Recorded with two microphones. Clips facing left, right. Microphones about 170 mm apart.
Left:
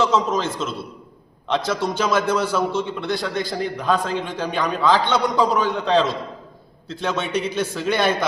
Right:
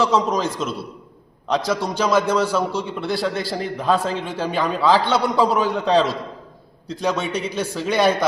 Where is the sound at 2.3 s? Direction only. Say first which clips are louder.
Right 1 dB; 30° right (ahead or behind).